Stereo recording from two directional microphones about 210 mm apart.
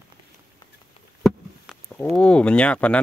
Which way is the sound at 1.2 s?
Centre (ahead or behind).